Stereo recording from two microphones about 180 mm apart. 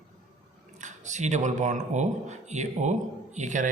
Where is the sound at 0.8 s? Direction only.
40° right (ahead or behind).